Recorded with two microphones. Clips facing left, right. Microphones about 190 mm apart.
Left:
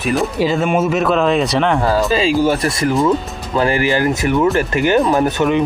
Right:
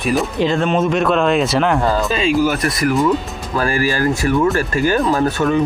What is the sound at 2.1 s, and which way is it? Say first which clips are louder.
Speech: left 2 dB; 30° left (ahead or behind).